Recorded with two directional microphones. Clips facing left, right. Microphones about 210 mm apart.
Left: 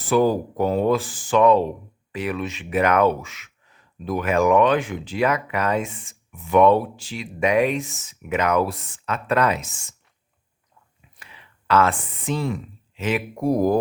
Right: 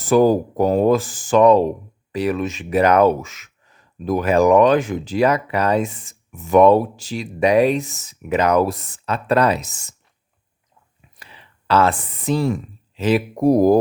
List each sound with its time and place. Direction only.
0.0 s speech: 45° right (ahead or behind)
11.2 s speech: 30° right (ahead or behind)